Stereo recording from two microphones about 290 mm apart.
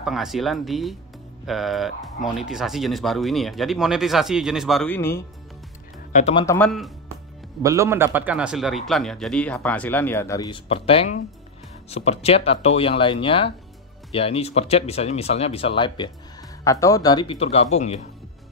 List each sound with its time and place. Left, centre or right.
0.0 s speech: centre
6.1 s speech: left
6.4 s speech: centre
7.6 s speech: centre; by 18.0 s left